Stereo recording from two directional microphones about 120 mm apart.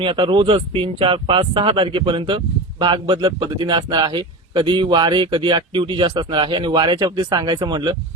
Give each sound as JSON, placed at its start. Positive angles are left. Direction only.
{"t": 0.0, "sound": "speech", "side_deg": -45}